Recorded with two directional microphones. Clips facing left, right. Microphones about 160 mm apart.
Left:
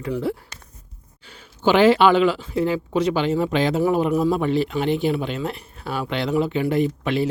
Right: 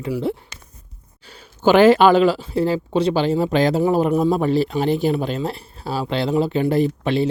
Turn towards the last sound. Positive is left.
turn(degrees=-30)  # may be behind; listen again after turning